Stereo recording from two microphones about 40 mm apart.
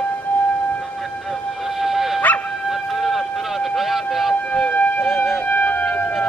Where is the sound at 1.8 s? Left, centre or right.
Centre.